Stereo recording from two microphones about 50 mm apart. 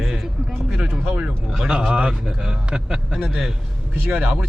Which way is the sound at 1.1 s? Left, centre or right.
Centre.